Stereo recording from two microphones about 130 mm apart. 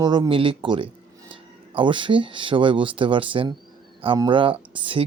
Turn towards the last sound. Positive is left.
turn(degrees=-45)  # may be behind; listen again after turning